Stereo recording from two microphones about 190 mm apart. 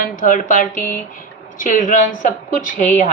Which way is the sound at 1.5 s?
40° left (ahead or behind).